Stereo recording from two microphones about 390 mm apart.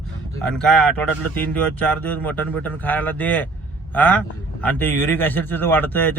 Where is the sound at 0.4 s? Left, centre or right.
Centre.